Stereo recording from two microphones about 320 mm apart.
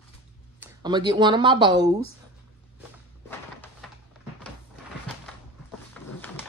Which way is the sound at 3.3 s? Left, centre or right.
Centre.